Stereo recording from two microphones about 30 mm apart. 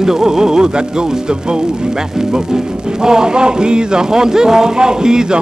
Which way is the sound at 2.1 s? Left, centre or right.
Right.